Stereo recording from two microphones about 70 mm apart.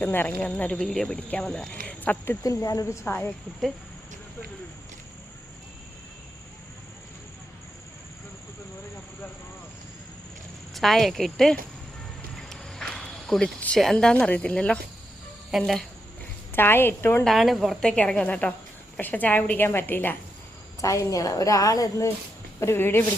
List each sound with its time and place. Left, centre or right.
0.0 s a woman's voice: left
0.9 s a woman's voice: centre
1.7 s a sound: left
2.4 s a woman's voice: left
2.8 s a woman's voice: left
10.8 s speech: centre
12.5 s walk: centre
13.9 s a woman's voice: centre
15.5 s speech: centre
16.5 s a woman's voice: left
17.2 s a woman's voice: centre; by 20.1 s left
20.8 s a woman's voice: left
22.6 s a woman's voice: left